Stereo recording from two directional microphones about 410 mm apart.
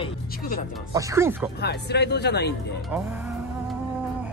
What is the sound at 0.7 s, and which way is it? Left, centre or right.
Speech, centre.